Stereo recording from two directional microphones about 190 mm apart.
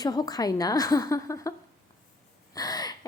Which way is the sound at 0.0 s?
20° left (ahead or behind).